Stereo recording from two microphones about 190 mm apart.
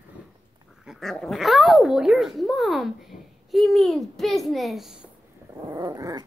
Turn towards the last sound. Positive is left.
turn(degrees=-20)  # may be behind; listen again after turning